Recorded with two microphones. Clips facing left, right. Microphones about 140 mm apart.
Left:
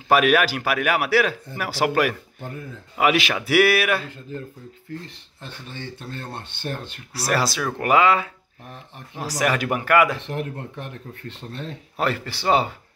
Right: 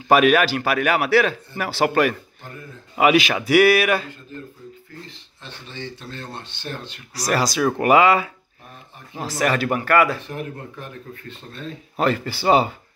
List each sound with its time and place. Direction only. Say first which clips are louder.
0.1 s a man's voice: right 2 dB; 5° left (ahead or behind)
5.0 s speech: left 1 dB; 50° left (ahead or behind)
7.2 s a man's voice: right 2 dB; 5° left (ahead or behind)
7.7 s speech: right 2 dB; 10° right (ahead or behind)
9.2 s a man's voice: right 1 dB; 10° left (ahead or behind)
10.2 s speech: left 2 dB; 70° left (ahead or behind)
12.0 s a man's voice: right 4 dB; centre (ahead or behind)